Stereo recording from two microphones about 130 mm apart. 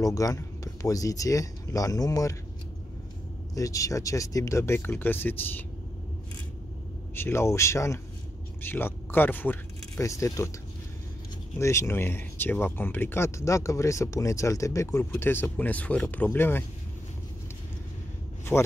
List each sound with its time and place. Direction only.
0.0 s speech: 25° left (ahead or behind)
3.5 s speech: 25° left (ahead or behind)
7.2 s speech: 20° left (ahead or behind)
11.5 s speech: 20° left (ahead or behind)
18.5 s speech: 15° left (ahead or behind)